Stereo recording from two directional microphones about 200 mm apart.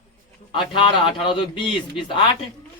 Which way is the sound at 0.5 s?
25° left (ahead or behind).